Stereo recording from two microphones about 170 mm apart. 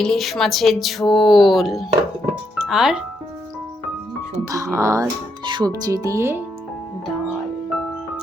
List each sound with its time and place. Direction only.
0.0 s speech: centre (ahead or behind)
4.4 s speech: 15° right (ahead or behind)